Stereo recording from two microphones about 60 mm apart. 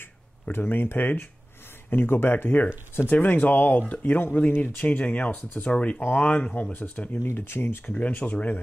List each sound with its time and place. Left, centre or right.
0.0 s speech: left
7.2 s speech: left
7.8 s speech: left